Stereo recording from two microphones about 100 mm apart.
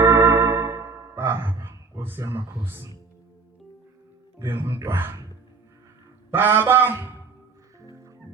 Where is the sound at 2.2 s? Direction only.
30° right (ahead or behind).